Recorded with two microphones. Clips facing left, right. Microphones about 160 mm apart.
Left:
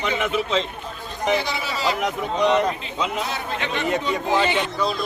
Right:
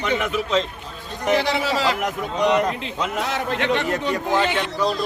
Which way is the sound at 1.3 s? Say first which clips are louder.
Right 5 dB; 80° right.